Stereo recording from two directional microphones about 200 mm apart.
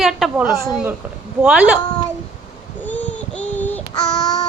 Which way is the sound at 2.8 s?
5° left (ahead or behind).